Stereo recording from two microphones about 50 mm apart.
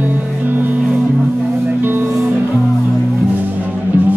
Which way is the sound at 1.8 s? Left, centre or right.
Right.